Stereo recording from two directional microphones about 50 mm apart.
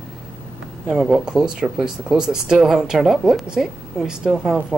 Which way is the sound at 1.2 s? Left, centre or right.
Centre.